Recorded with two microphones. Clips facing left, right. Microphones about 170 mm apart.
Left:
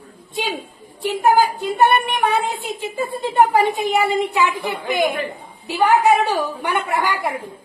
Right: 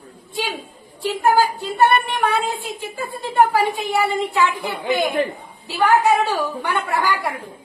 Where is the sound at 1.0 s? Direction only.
20° left (ahead or behind).